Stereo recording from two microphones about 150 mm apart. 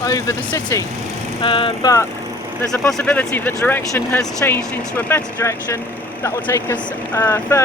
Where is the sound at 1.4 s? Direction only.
35° left (ahead or behind).